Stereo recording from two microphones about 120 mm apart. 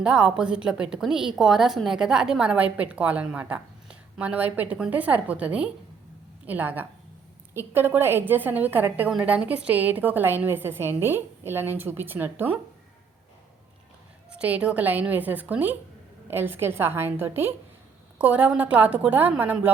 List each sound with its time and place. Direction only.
0.0 s a woman's voice: 5° right (ahead or behind)
14.3 s a woman's voice: 10° right (ahead or behind)